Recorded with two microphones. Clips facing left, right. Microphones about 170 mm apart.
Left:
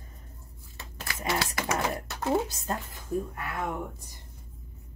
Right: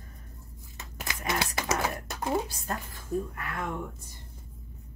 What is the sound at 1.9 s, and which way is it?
Speech, 20° left (ahead or behind).